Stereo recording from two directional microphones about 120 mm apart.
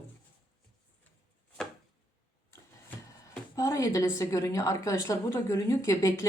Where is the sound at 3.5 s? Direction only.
30° left (ahead or behind).